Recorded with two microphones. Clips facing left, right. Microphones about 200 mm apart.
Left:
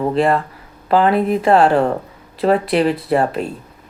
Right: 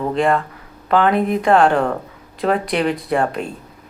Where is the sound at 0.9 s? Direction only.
35° left (ahead or behind).